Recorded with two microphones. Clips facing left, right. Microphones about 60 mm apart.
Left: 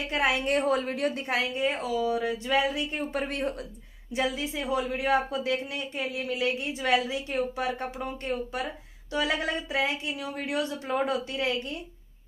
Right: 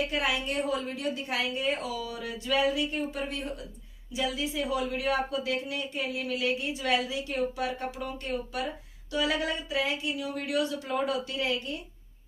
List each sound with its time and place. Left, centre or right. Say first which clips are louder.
0.1 s speech: left 4 dB; left
1.5 s speech: left 3 dB; left
3.1 s speech: left 4 dB; left
4.1 s speech: left 2 dB; left